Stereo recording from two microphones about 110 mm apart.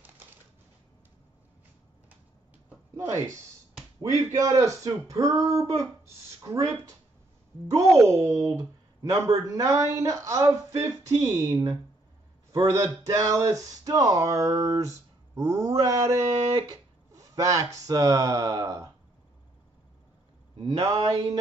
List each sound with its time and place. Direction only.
3.0 s speech: 25° right (ahead or behind)
7.7 s speech: 25° right (ahead or behind)
20.8 s speech: 35° right (ahead or behind)